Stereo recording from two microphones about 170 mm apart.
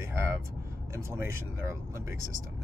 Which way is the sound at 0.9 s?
15° right (ahead or behind).